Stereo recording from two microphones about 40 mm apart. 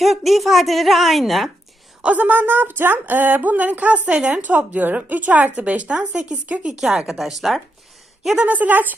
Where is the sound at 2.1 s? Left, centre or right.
Right.